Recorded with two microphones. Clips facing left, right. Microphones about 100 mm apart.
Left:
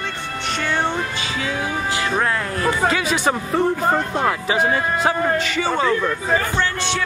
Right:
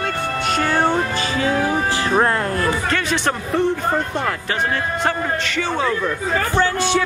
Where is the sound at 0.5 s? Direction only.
40° right (ahead or behind).